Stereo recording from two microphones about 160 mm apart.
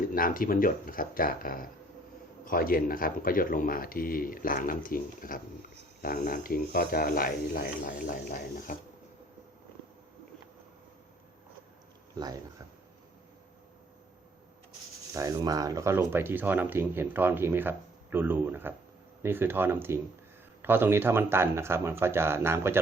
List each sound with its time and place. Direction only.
0.1 s speech: 60° left (ahead or behind)
12.1 s speech: 25° right (ahead or behind)
15.1 s speech: 20° right (ahead or behind)